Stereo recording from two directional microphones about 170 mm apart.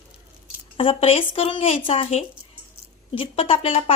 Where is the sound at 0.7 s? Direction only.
35° left (ahead or behind).